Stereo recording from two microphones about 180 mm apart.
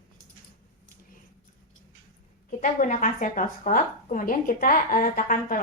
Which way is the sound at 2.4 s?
45° left (ahead or behind).